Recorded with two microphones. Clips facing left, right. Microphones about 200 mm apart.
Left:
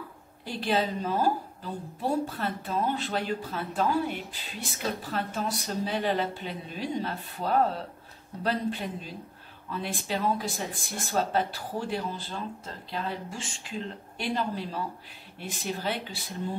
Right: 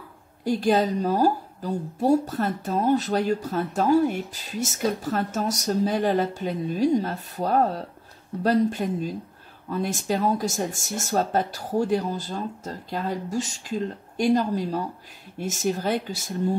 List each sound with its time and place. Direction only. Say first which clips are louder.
0.5 s a woman's voice: right 7 dB; 45° right (ahead or behind)